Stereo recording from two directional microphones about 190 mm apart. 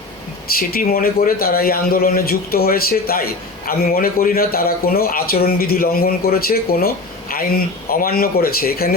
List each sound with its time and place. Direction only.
0.5 s speech: 50° left (ahead or behind)